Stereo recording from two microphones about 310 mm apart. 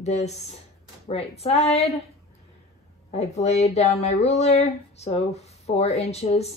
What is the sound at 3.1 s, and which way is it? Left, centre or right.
Speech, left.